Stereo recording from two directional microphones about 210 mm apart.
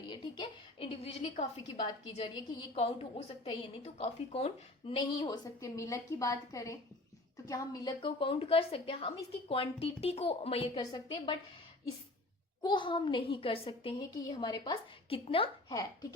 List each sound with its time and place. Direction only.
0.1 s a woman's voice: 20° left (ahead or behind)
12.6 s a woman's voice: 25° left (ahead or behind)